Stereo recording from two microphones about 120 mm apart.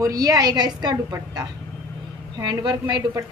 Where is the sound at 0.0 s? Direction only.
30° right (ahead or behind).